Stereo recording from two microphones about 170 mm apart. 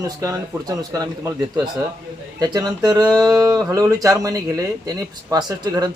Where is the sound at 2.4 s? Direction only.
25° right (ahead or behind).